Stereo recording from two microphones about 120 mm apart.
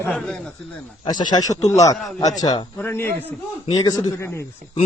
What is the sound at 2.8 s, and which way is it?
Speech, 20° left (ahead or behind).